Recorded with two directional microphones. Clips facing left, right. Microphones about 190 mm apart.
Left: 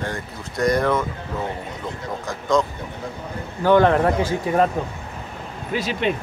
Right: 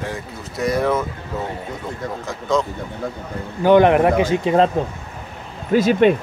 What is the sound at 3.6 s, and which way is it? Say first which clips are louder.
A man's voice: right 3 dB; 15° right (ahead or behind).